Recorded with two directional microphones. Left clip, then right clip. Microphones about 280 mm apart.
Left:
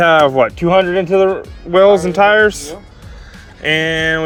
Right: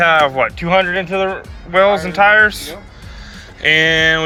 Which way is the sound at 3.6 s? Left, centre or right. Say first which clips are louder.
Right 3 dB; centre.